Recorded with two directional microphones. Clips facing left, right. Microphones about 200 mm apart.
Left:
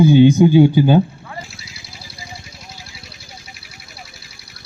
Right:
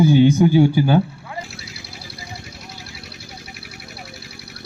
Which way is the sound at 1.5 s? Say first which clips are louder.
Right 3 dB; 60° right (ahead or behind).